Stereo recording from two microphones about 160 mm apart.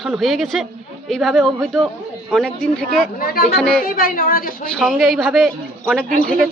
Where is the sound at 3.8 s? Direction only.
65° left (ahead or behind).